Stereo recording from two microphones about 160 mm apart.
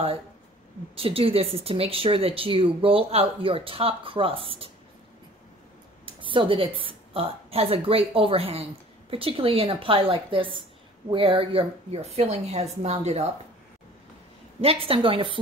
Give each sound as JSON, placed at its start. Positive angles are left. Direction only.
{"t": 0.9, "sound": "speech", "side_deg": -35}
{"t": 6.0, "sound": "speech", "side_deg": -30}
{"t": 14.6, "sound": "speech", "side_deg": -35}